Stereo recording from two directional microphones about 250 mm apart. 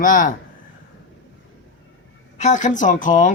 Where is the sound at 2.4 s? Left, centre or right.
Left.